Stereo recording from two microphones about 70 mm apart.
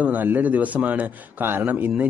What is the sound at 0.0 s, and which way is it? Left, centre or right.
A man's voice, right.